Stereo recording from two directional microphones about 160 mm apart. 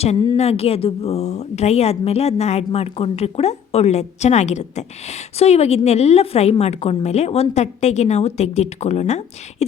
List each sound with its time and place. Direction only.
0.3 s a woman's voice: 40° left (ahead or behind)